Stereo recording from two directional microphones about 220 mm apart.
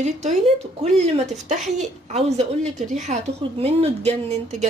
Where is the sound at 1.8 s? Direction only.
30° right (ahead or behind).